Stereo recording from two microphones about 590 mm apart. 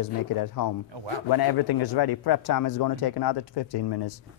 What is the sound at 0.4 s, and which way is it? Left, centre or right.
A man's voice, left.